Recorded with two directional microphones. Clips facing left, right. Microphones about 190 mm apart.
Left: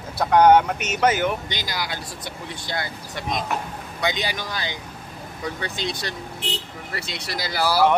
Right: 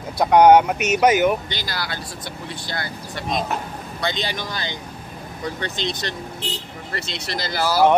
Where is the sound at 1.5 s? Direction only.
15° left (ahead or behind).